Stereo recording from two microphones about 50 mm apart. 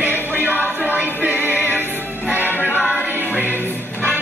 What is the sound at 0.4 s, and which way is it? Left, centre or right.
Music, right.